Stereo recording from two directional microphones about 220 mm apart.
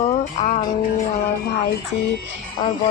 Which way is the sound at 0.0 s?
30° left (ahead or behind).